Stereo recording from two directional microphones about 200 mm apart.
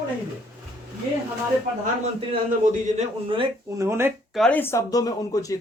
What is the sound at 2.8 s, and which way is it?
Speech, 25° right (ahead or behind).